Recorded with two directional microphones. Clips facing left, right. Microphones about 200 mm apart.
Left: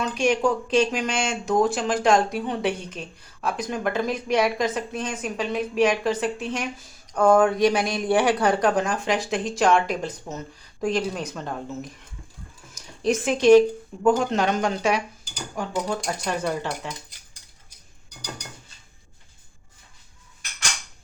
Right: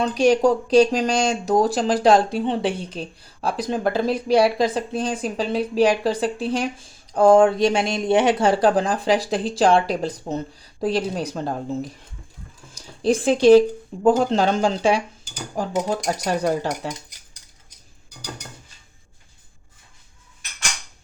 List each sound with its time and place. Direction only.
0.0 s speech: 35° right (ahead or behind)